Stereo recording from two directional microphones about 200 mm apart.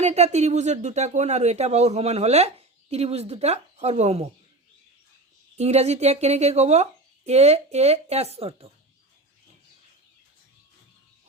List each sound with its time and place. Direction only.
0.0 s speech: 35° right (ahead or behind)
5.5 s speech: 35° right (ahead or behind)